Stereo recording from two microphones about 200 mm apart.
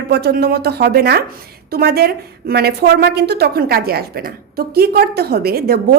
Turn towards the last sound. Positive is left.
turn(degrees=-50)  # may be behind; listen again after turning